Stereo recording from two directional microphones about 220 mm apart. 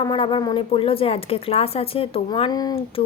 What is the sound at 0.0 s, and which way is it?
A woman's voice, 20° left (ahead or behind).